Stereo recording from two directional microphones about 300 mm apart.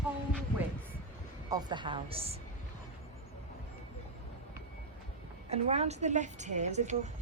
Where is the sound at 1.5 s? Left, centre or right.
Centre.